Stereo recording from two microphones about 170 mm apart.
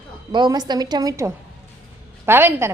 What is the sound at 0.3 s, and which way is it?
A woman's voice, 25° right (ahead or behind).